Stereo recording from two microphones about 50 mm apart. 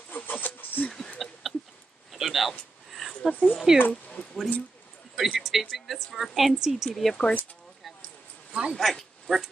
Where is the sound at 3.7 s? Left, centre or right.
Centre.